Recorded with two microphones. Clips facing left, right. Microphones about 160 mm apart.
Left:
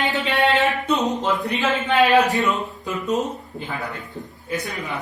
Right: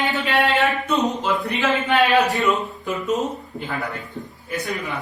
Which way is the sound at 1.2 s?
20° left (ahead or behind).